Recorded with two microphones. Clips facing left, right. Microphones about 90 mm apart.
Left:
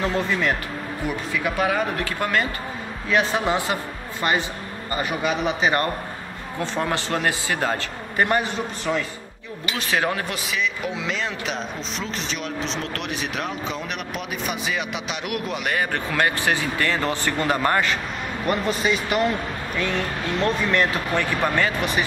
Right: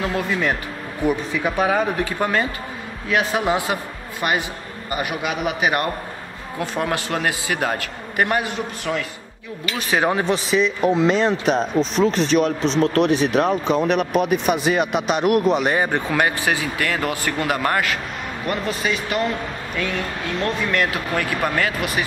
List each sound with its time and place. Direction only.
0.0 s speech: 10° right (ahead or behind)
9.8 s speech: 15° right (ahead or behind)
10.5 s speech: 40° right (ahead or behind)
12.8 s speech: 40° right (ahead or behind)
15.7 s speech: 20° right (ahead or behind); by 19.3 s centre (ahead or behind)
20.3 s speech: centre (ahead or behind)